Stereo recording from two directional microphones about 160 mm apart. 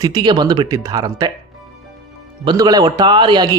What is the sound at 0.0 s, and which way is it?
A man's voice, 25° right (ahead or behind).